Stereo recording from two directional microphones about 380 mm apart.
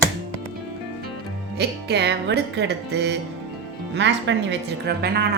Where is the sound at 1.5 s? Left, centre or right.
Right.